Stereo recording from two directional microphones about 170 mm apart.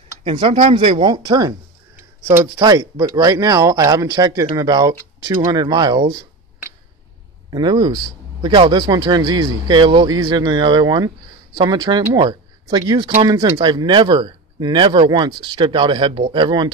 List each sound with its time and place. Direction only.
0.2 s speech: 30° right (ahead or behind)
2.5 s speech: 20° right (ahead or behind)
7.5 s speech: 25° right (ahead or behind)